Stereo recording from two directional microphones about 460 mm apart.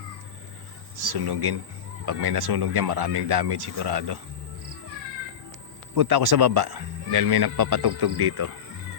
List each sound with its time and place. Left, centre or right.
1.1 s speech: right
5.9 s speech: right